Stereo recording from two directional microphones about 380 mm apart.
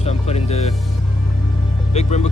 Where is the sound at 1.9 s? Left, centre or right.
Centre.